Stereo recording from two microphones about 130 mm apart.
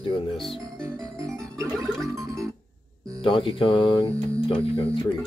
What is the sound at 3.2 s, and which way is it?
Speech, 40° left (ahead or behind).